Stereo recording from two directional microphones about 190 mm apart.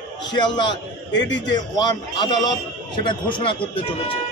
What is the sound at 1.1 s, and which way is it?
Speech, 70° left (ahead or behind).